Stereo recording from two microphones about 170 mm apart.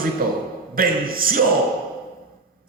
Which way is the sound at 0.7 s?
60° right (ahead or behind).